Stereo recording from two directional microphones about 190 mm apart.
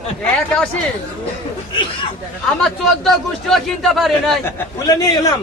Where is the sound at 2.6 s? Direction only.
Centre (ahead or behind).